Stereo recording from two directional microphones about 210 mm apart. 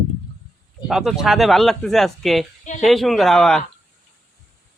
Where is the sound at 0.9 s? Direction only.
Centre (ahead or behind).